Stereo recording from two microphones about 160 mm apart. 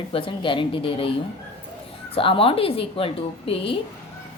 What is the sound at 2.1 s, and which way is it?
Speech, 35° left (ahead or behind).